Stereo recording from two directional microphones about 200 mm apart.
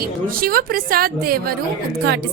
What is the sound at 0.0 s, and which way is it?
A woman's voice, 45° right (ahead or behind).